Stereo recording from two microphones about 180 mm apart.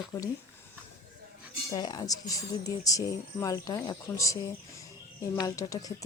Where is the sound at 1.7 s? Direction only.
20° left (ahead or behind).